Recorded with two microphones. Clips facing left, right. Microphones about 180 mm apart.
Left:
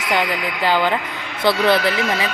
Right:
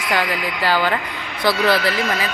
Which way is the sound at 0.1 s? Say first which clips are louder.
Left 1 dB; 20° left (ahead or behind).